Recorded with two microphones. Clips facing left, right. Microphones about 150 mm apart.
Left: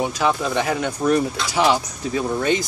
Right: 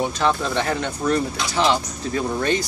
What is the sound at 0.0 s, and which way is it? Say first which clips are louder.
Speech: even; 5° left (ahead or behind).